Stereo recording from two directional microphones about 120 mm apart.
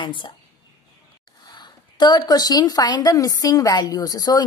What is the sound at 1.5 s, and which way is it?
A woman's voice, 35° left (ahead or behind).